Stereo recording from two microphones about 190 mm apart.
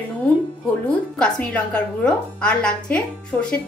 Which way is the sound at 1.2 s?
5° left (ahead or behind).